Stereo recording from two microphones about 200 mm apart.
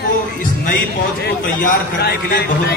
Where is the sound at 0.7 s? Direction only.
45° left (ahead or behind).